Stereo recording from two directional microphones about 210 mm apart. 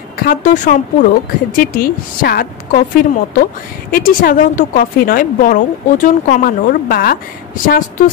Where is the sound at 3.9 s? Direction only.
45° left (ahead or behind).